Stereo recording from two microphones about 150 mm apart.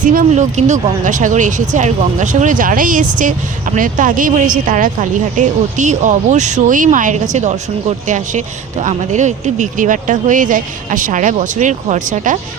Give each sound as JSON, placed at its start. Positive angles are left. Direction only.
{"t": 0.0, "sound": "speech", "side_deg": -60}